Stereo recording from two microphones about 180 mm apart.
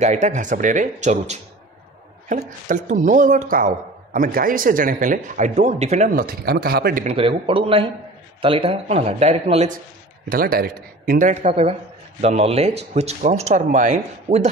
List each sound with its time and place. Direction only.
0.0 s speech: 40° right (ahead or behind)
7.1 s speech: 30° right (ahead or behind)
10.3 s speech: 55° right (ahead or behind); by 14.5 s 40° right (ahead or behind)